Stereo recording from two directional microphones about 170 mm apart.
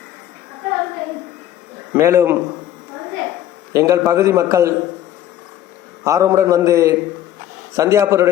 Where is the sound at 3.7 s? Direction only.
20° right (ahead or behind).